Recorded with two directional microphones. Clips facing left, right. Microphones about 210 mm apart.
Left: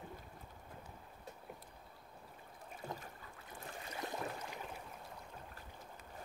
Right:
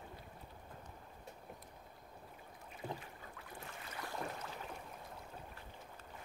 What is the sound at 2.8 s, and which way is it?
Boat, 45° left (ahead or behind).